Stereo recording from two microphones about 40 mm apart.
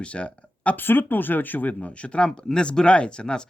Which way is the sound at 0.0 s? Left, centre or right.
Left.